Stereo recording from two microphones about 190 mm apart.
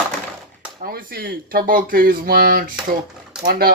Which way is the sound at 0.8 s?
50° right (ahead or behind).